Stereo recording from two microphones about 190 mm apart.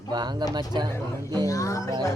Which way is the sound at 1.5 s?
15° left (ahead or behind).